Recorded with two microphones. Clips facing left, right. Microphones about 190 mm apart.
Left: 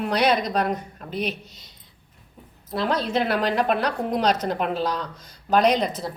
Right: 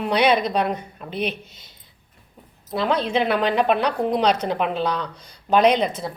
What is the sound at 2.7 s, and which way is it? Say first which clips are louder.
Speech: right 2 dB; centre (ahead or behind).